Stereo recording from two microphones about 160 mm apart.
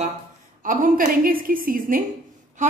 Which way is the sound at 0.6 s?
55° right (ahead or behind).